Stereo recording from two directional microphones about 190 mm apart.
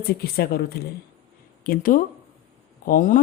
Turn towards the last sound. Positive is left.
turn(degrees=45)  # may be behind; listen again after turning